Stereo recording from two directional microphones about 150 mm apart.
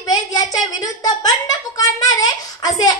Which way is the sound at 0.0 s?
25° left (ahead or behind).